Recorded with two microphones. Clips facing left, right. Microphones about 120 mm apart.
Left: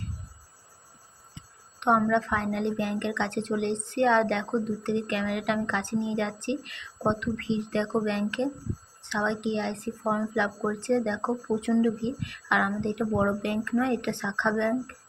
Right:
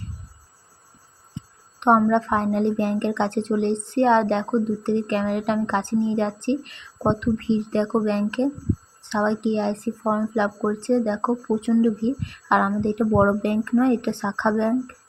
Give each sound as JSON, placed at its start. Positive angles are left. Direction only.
{"t": 1.4, "sound": "a sound", "side_deg": -35}
{"t": 2.0, "sound": "speech", "side_deg": -35}
{"t": 12.2, "sound": "speech", "side_deg": -35}